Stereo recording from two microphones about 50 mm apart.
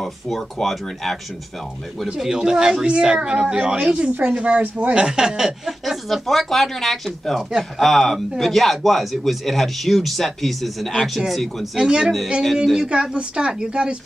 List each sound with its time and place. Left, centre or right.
0.0 s speech: centre
2.1 s a woman's voice: centre